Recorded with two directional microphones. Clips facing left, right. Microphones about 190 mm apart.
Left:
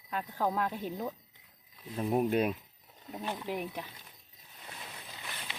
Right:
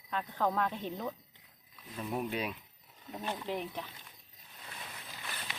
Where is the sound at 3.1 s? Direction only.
10° left (ahead or behind).